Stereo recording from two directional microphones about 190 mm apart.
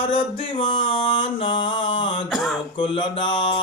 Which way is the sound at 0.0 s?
30° left (ahead or behind).